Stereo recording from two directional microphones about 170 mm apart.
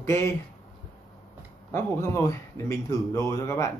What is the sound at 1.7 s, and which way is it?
Speech, 15° left (ahead or behind).